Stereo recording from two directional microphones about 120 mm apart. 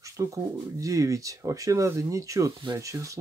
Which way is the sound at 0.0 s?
25° right (ahead or behind).